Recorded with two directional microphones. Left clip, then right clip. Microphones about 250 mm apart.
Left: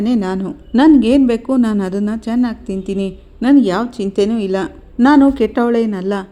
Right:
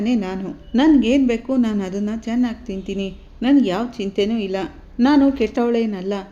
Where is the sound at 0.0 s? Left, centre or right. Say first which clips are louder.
Left 5 dB; left.